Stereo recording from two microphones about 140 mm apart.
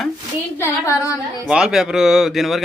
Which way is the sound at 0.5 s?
20° left (ahead or behind).